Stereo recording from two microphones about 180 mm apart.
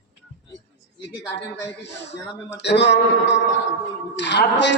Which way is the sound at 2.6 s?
75° left (ahead or behind).